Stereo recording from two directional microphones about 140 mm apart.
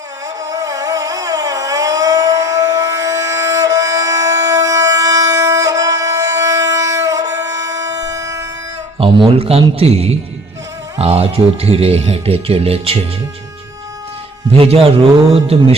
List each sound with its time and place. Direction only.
0.4 s a sound: 25° right (ahead or behind)
9.0 s speech: 40° right (ahead or behind)
15.3 s speech: 45° right (ahead or behind)